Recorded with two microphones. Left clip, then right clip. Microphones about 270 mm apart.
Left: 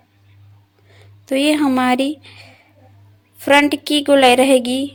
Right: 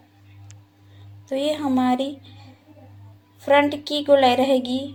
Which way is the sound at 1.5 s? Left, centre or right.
Left.